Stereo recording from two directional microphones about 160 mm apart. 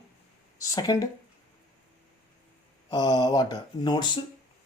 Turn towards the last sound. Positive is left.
turn(degrees=25)  # may be behind; listen again after turning